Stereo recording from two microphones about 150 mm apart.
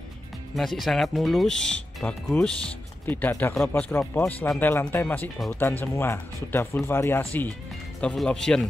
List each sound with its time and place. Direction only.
0.6 s speech: centre (ahead or behind)
8.0 s speech: 5° left (ahead or behind)